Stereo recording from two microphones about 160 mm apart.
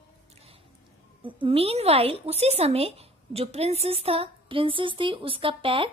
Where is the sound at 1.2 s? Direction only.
35° right (ahead or behind).